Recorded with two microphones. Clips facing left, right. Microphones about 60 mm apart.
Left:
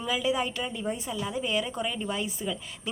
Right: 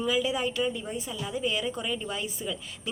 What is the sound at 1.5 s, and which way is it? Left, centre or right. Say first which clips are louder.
Speech: left 2 dB; left.